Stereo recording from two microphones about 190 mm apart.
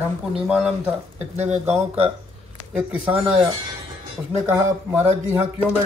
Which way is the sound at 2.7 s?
10° right (ahead or behind).